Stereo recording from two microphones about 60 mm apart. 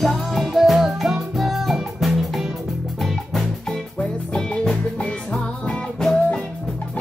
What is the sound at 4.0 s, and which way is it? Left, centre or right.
Music, centre.